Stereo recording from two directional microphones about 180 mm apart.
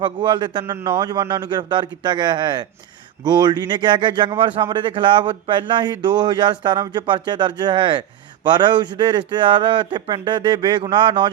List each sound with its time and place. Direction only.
0.0 s speech: 25° right (ahead or behind)